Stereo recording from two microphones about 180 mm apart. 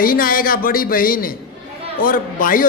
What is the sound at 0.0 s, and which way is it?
A man's voice, 55° left (ahead or behind).